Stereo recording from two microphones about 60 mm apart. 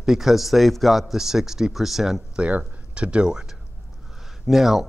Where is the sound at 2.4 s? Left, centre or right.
Right.